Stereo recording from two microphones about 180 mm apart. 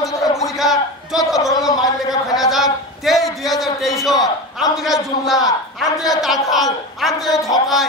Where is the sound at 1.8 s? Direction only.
20° left (ahead or behind).